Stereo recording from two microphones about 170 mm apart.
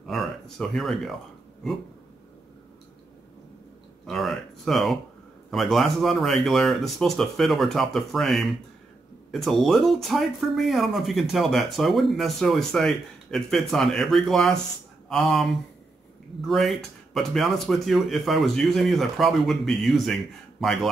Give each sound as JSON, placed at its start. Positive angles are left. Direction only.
{"t": 0.0, "sound": "a sound", "side_deg": 0}
{"t": 1.6, "sound": "speech", "side_deg": 0}
{"t": 4.0, "sound": "speech", "side_deg": 0}